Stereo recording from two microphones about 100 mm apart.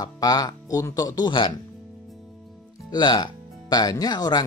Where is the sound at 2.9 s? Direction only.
45° left (ahead or behind).